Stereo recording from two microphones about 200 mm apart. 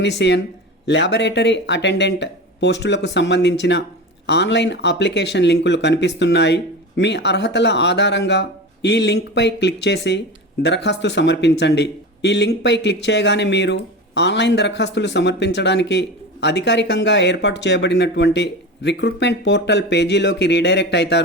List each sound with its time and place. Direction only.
0.0 s speech: 60° left (ahead or behind)